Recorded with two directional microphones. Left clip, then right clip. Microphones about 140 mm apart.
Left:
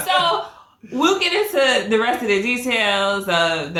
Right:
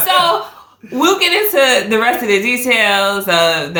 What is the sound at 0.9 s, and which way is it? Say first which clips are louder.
A woman's voice: right 5 dB; 25° right (ahead or behind).